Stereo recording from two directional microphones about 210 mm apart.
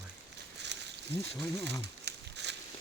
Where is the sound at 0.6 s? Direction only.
55° right (ahead or behind).